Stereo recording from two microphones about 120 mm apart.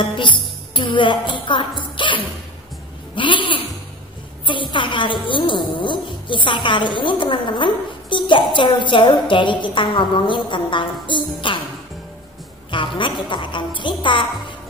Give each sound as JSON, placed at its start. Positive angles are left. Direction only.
{"t": 0.1, "sound": "a woman's voice", "side_deg": 40}
{"t": 12.7, "sound": "a woman's voice", "side_deg": 45}